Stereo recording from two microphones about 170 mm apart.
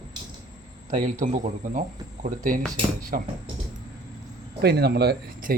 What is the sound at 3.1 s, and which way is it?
Speech, 55° right (ahead or behind).